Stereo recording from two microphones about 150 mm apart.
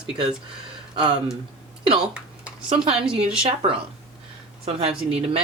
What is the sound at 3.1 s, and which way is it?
Speech, 5° right (ahead or behind).